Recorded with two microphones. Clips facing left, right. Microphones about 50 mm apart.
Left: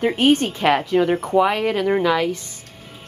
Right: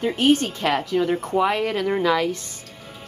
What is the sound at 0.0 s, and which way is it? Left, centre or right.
Speech, left.